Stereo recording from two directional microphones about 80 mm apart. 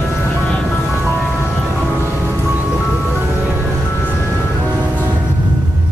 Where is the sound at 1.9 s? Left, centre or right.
Right.